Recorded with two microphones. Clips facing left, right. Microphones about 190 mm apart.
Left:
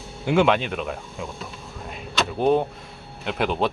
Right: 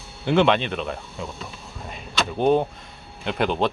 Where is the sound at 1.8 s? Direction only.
Centre (ahead or behind).